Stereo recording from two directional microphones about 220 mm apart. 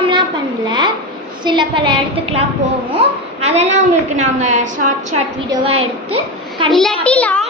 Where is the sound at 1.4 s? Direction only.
20° right (ahead or behind).